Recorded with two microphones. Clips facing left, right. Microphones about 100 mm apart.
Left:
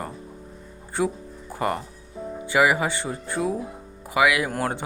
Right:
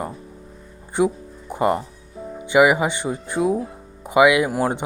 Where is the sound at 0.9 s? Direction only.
20° right (ahead or behind).